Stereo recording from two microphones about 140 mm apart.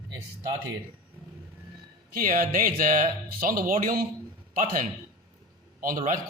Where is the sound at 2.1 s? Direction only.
80° right.